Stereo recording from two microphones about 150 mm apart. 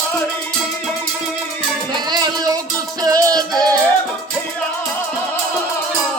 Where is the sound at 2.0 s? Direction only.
25° right (ahead or behind).